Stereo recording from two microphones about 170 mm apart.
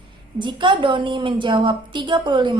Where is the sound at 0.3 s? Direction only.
30° right (ahead or behind).